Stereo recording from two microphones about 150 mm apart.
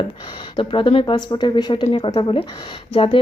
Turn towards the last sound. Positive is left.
turn(degrees=35)  # may be behind; listen again after turning